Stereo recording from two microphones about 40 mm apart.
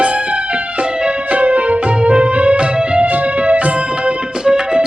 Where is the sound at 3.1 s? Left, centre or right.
Right.